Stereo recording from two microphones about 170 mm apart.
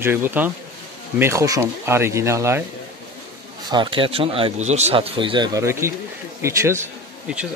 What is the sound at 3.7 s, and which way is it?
Speech, 30° right (ahead or behind).